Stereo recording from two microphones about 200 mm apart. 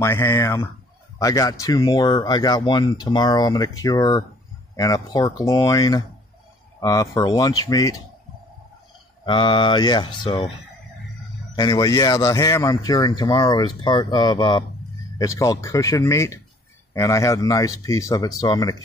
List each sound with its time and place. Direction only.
0.0 s speech: 10° left (ahead or behind)
9.2 s speech: 25° left (ahead or behind)
11.5 s speech: 15° left (ahead or behind)